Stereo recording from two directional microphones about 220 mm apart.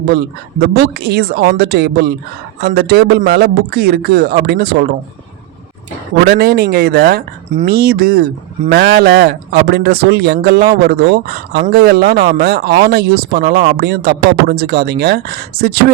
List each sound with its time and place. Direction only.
0.1 s speech: 45° right (ahead or behind)
6.2 s speech: 45° right (ahead or behind)